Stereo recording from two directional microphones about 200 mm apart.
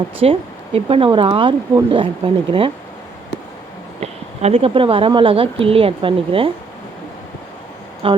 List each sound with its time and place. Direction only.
0.2 s speech: 30° right (ahead or behind)
4.0 s speech: 30° right (ahead or behind)
8.0 s speech: 30° right (ahead or behind)